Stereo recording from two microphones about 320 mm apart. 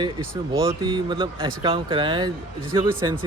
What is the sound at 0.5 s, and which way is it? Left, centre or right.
Speech, centre.